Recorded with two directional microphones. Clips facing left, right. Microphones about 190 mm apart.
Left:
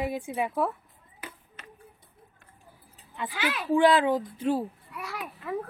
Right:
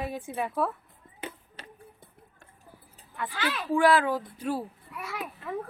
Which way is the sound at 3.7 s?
20° left (ahead or behind).